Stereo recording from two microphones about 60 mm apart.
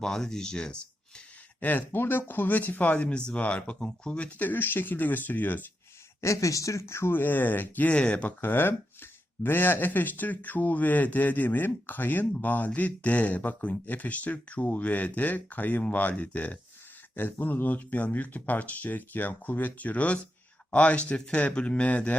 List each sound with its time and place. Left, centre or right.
0.0 s speech: centre
1.6 s speech: left
6.2 s speech: left
7.1 s speech: left; by 8.3 s centre
8.4 s speech: left